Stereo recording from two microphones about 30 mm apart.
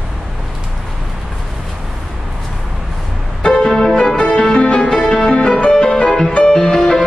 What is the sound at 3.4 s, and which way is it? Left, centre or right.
Music, left.